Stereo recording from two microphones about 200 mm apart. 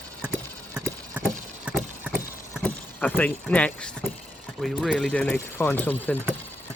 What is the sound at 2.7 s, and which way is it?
Speech, 10° left (ahead or behind).